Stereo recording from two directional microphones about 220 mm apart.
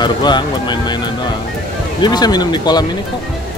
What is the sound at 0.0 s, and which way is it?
Speech, 20° left (ahead or behind).